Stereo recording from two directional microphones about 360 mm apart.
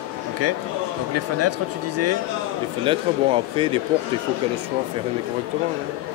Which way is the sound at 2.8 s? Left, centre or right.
Centre.